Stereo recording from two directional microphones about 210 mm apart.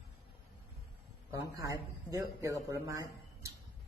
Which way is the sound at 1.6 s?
15° right (ahead or behind).